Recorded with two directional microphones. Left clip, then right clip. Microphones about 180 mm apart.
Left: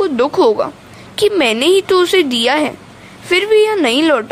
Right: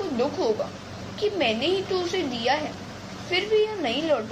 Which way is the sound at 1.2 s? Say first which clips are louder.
Left 12 dB; 55° left (ahead or behind).